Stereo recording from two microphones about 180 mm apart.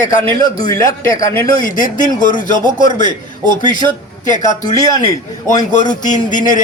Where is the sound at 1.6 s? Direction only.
50° left (ahead or behind).